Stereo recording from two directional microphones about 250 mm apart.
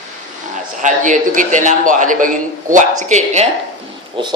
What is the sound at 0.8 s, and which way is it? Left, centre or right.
A man's voice, right.